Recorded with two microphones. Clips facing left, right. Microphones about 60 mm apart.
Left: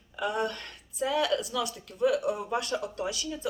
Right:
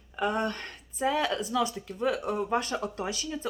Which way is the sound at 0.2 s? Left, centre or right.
Right.